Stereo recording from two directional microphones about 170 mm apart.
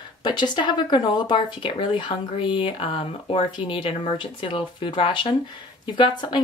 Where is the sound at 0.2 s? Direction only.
25° left (ahead or behind).